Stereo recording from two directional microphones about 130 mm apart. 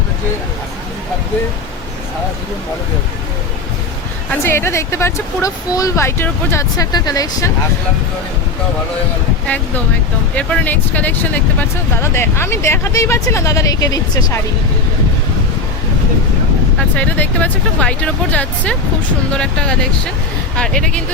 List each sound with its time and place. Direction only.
4.3 s speech: 20° left (ahead or behind)
10.3 s speech: 10° left (ahead or behind); by 14.4 s 30° left (ahead or behind)
16.9 s speech: 10° left (ahead or behind)